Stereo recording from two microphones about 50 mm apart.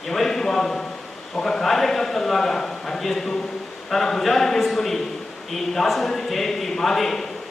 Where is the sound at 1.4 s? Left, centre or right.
Centre.